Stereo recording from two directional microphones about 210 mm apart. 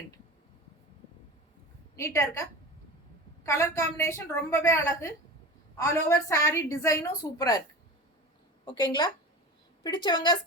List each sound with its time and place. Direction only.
2.0 s a woman's voice: 15° left (ahead or behind)
9.8 s speech: 20° left (ahead or behind)